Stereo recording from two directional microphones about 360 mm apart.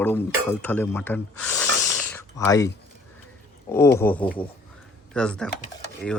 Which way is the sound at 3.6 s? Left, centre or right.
Centre.